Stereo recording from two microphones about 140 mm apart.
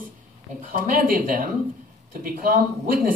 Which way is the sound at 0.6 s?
80° right.